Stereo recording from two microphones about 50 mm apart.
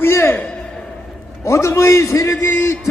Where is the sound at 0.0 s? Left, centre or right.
Left.